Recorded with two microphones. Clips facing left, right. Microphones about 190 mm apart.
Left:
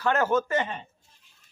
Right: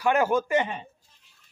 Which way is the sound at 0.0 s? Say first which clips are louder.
Right 1 dB; 10° right (ahead or behind).